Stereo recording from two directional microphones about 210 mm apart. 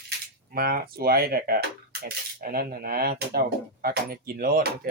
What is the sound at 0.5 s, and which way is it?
Speech, 45° right (ahead or behind).